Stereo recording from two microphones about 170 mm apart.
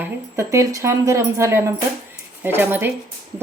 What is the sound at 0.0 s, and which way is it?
Speech, 15° right (ahead or behind).